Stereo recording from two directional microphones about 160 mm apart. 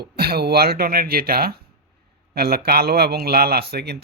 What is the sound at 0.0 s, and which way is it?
A man's voice, 75° right (ahead or behind).